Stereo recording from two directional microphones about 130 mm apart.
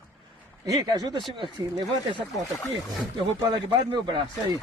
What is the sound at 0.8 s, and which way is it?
Speech, 30° right (ahead or behind).